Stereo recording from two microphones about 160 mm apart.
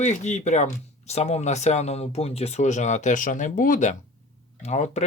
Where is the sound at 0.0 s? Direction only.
45° left (ahead or behind).